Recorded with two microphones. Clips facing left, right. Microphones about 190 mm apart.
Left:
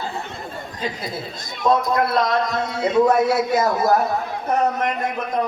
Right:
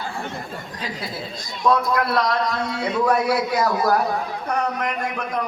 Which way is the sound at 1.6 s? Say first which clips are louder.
Left 1 dB; 25° left (ahead or behind).